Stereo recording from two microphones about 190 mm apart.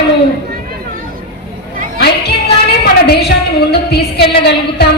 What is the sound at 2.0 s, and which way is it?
Child singing, 60° left (ahead or behind).